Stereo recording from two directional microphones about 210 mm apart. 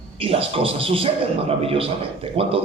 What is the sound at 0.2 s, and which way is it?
A man's voice, 25° right (ahead or behind).